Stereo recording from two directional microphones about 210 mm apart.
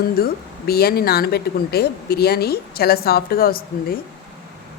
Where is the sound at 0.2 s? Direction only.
45° left (ahead or behind).